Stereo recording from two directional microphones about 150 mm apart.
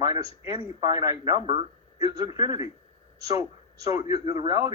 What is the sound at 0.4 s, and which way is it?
A man's voice, 25° right (ahead or behind).